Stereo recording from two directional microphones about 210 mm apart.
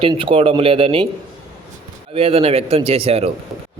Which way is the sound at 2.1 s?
25° right (ahead or behind).